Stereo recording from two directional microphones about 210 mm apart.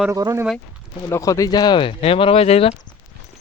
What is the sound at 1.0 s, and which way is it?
Speech, 15° left (ahead or behind).